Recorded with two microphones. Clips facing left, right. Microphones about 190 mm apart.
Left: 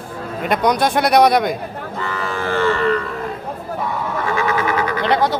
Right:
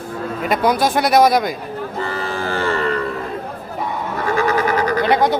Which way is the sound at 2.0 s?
35° right (ahead or behind).